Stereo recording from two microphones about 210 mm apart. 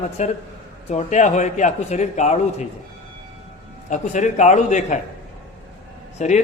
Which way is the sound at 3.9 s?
35° left (ahead or behind).